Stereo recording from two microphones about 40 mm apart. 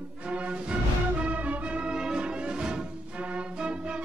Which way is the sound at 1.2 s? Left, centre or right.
Right.